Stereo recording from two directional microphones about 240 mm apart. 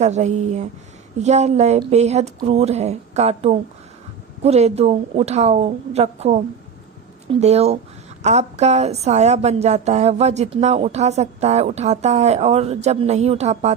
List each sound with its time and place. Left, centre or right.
0.0 s a woman's voice: right